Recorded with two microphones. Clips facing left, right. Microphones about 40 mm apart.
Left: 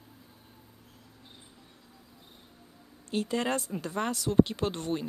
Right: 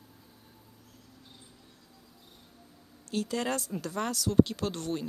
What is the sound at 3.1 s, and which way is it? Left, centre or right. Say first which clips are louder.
Speech: left 2 dB; left.